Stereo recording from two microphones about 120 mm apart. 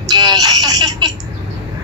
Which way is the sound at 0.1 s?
35° right (ahead or behind).